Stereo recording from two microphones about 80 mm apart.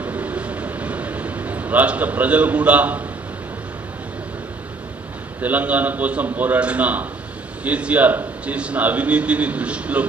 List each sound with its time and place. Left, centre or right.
0.0 s vehicle: centre
5.4 s a man's voice: centre